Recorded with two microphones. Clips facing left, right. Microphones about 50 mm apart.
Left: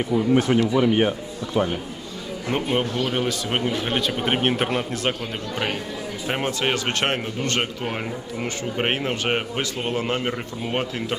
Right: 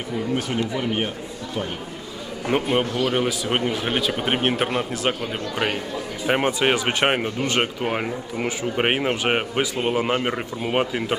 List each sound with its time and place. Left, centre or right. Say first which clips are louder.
0.6 s speech: left 5 dB; left
2.5 s a man's voice: right 2 dB; centre
6.2 s speech: right 4 dB; centre